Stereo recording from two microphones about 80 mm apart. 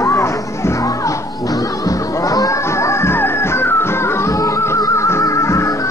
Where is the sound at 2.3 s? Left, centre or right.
Left.